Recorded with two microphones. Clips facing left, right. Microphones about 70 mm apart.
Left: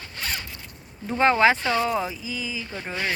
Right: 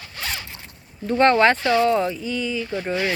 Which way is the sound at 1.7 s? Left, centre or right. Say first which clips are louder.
Right 6 dB; centre.